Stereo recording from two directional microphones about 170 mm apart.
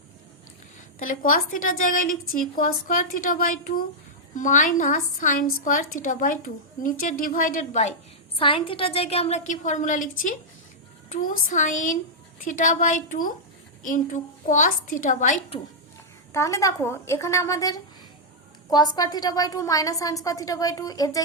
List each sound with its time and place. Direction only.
0.9 s a woman's voice: 55° left (ahead or behind)
8.4 s a woman's voice: 30° left (ahead or behind); by 15.4 s 50° left (ahead or behind)
16.3 s a woman's voice: 20° left (ahead or behind)